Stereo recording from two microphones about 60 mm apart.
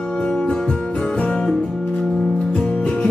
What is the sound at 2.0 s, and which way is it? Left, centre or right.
Music, centre.